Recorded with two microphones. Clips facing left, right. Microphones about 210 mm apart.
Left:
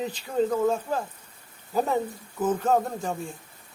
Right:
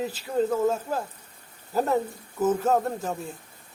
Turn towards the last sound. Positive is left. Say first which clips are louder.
# even
turn(degrees=-5)  # may be behind; listen again after turning